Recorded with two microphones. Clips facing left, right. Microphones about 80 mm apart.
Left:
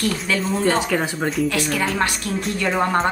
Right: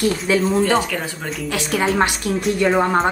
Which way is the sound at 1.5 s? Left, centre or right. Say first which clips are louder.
Right 2 dB; right.